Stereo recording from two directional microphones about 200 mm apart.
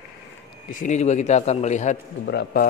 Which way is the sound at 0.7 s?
35° left (ahead or behind).